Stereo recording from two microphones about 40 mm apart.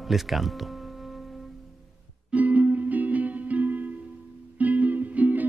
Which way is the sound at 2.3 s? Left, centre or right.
Right.